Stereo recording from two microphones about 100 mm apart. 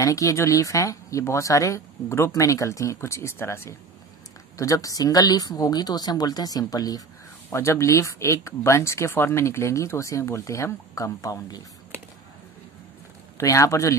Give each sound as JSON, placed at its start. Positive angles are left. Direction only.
{"t": 0.0, "sound": "speech", "side_deg": 35}
{"t": 7.5, "sound": "speech", "side_deg": 30}
{"t": 13.4, "sound": "speech", "side_deg": 30}